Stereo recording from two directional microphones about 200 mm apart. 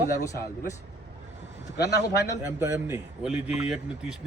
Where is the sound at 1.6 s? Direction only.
55° left (ahead or behind).